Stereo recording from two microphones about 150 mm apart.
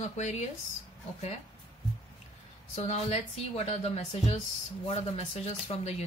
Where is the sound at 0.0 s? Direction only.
50° left (ahead or behind).